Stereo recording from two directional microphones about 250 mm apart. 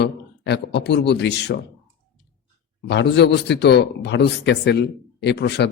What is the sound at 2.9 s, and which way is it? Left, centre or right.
A man's voice, left.